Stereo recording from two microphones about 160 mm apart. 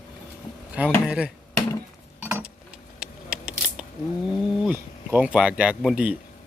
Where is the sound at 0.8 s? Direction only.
10° right (ahead or behind).